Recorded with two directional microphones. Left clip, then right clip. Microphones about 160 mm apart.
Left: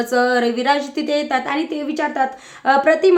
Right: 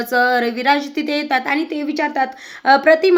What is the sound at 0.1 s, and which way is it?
A woman's voice, 30° right (ahead or behind).